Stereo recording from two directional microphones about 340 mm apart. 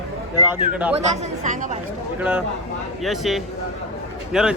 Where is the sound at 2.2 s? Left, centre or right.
Centre.